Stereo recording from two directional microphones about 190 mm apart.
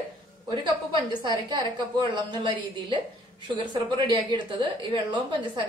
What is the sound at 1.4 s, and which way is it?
A woman's voice, 25° right (ahead or behind).